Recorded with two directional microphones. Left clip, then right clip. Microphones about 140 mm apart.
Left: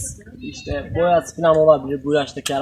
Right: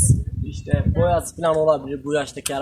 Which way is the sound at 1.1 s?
5° right (ahead or behind).